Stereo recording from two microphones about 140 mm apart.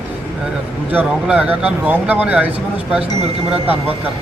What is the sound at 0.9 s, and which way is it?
Speech, 10° right (ahead or behind).